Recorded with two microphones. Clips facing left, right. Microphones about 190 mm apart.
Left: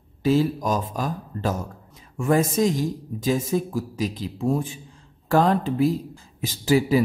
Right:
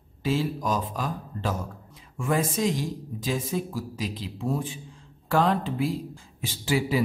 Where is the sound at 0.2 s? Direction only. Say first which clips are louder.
Left 6 dB; 40° left (ahead or behind).